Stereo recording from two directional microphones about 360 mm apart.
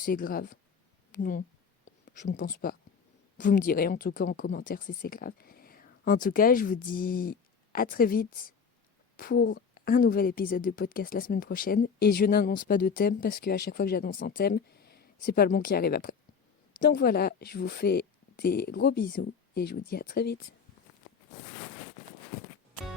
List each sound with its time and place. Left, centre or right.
0.0 s a woman's voice: left